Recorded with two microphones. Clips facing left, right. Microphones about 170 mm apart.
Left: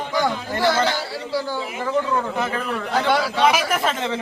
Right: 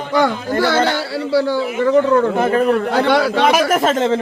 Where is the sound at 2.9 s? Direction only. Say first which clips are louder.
Right 6 dB; 65° right (ahead or behind); by 4.1 s 45° right (ahead or behind).